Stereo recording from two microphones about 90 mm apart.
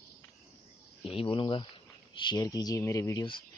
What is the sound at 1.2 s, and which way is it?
Speech, 75° left (ahead or behind).